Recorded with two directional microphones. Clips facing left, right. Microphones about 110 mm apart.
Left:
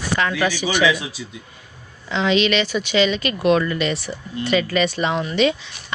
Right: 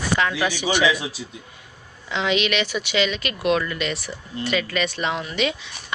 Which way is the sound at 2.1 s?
10° right (ahead or behind).